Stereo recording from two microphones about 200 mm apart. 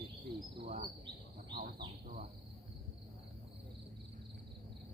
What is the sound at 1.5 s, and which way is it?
Speech, 45° right (ahead or behind).